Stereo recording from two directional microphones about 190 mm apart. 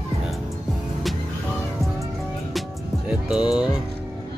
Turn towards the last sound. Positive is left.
turn(degrees=-5)  # may be behind; listen again after turning